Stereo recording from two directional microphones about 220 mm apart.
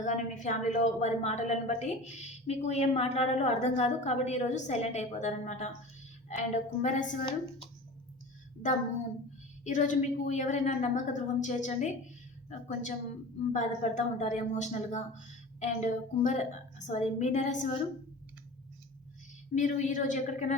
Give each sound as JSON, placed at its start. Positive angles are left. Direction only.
{"t": 0.0, "sound": "a woman's voice", "side_deg": 35}
{"t": 9.6, "sound": "a woman's voice", "side_deg": 35}
{"t": 19.5, "sound": "a woman's voice", "side_deg": 35}